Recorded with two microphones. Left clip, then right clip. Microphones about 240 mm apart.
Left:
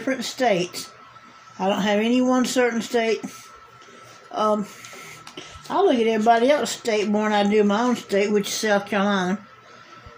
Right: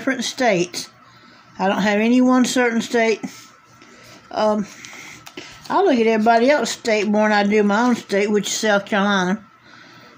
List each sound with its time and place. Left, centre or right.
0.0 s speech: right
4.3 s speech: right